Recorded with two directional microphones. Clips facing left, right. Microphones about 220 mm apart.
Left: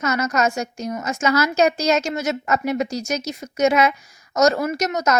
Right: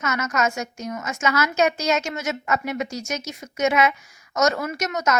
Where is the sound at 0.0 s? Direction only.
35° left (ahead or behind).